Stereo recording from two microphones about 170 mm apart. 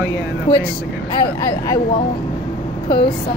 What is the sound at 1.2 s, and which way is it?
Speech, 25° left (ahead or behind).